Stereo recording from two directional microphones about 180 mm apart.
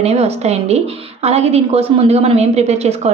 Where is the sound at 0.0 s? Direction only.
35° right (ahead or behind).